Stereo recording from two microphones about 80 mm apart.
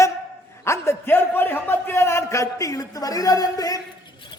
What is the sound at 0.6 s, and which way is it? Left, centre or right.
A man's voice, left.